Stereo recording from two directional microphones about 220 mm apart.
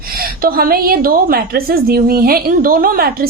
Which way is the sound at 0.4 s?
40° right (ahead or behind).